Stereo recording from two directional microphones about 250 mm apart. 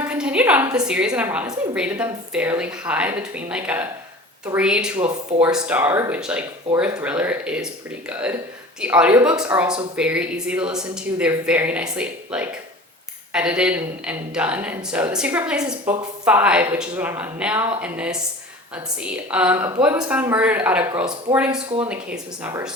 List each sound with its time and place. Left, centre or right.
0.1 s a woman's voice: centre
4.9 s speech: right
5.6 s a woman's voice: centre